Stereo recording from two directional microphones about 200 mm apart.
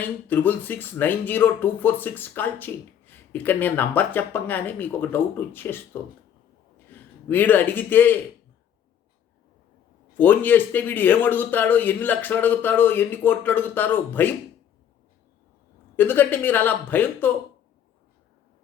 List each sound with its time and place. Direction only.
0.0 s a man's voice: 10° left (ahead or behind)
10.2 s speech: 10° left (ahead or behind)
16.0 s speech: 10° left (ahead or behind)